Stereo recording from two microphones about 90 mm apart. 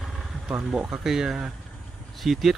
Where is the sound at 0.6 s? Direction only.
10° right (ahead or behind).